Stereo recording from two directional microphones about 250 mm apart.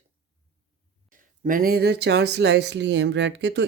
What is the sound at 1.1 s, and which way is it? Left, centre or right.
Speech, right.